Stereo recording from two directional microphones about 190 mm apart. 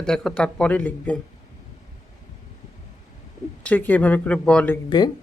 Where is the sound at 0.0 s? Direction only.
5° left (ahead or behind).